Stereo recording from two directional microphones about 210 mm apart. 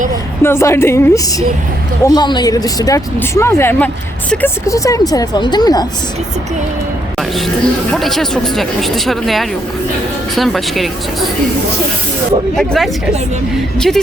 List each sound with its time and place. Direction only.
0.4 s speech: 10° left (ahead or behind)
7.2 s music: centre (ahead or behind)
7.9 s speech: centre (ahead or behind)
12.5 s speech: centre (ahead or behind)